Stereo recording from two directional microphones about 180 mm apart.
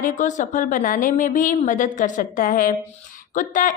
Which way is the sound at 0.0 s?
45° left (ahead or behind).